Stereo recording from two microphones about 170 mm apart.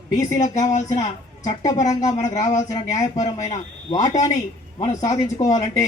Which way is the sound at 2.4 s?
20° left (ahead or behind).